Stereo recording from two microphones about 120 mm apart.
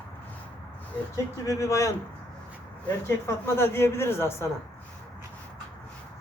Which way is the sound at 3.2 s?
20° left (ahead or behind).